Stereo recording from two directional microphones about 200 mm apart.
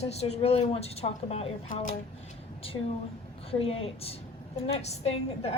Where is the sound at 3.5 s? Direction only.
30° left (ahead or behind).